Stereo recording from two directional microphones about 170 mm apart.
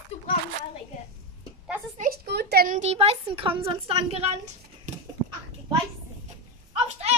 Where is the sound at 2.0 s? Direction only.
70° right (ahead or behind).